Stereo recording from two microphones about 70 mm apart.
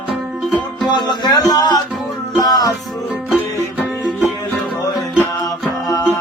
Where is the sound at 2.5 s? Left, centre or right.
Left.